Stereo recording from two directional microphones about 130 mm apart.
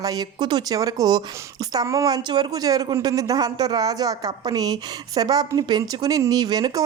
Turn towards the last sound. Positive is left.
turn(degrees=-30)  # may be behind; listen again after turning